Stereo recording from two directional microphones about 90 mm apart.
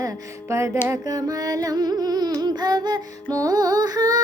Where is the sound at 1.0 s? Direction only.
45° right (ahead or behind).